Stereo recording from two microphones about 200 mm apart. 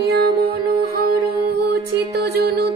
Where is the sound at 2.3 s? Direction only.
50° right (ahead or behind).